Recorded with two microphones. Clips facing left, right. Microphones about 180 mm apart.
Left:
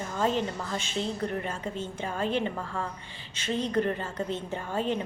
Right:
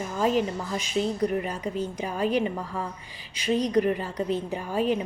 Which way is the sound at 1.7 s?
25° left (ahead or behind).